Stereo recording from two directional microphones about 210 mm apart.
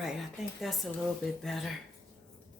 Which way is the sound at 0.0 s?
Centre (ahead or behind).